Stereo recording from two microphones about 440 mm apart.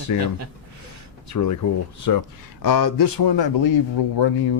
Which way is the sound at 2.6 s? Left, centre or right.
Left.